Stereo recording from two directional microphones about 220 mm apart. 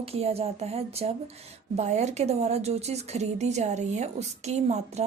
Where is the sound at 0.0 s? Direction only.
30° right (ahead or behind).